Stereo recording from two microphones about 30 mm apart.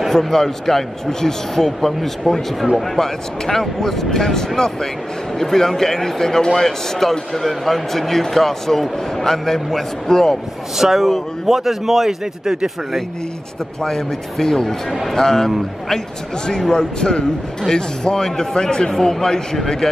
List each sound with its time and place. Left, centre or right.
0.1 s speech: centre
10.8 s a man's voice: centre
13.8 s speech: centre
16.7 s speech: left